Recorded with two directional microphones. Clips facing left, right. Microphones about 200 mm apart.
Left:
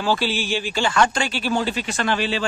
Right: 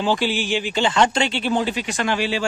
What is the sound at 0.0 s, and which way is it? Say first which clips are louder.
Speech: right 1 dB; 20° right (ahead or behind).